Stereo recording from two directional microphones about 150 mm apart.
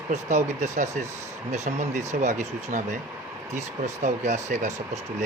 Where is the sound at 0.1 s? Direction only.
50° right (ahead or behind).